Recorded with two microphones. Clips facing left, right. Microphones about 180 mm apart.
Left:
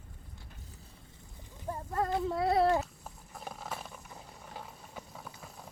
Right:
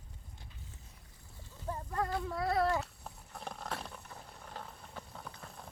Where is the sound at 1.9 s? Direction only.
25° left (ahead or behind).